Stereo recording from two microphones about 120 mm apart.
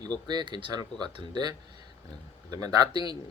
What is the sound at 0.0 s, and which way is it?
Speech, 35° right (ahead or behind).